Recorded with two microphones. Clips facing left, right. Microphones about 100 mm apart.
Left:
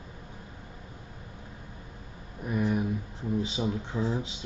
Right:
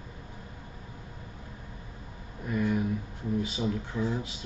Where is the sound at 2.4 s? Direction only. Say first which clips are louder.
Even; 20° left (ahead or behind).